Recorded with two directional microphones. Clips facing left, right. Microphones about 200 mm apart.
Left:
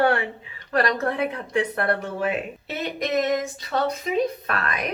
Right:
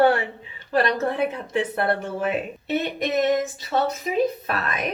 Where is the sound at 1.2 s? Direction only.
5° right (ahead or behind).